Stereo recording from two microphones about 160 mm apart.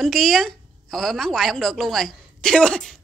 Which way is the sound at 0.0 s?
Centre (ahead or behind).